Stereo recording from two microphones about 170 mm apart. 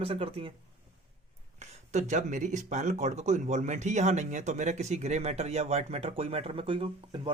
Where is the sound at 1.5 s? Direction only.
40° right (ahead or behind).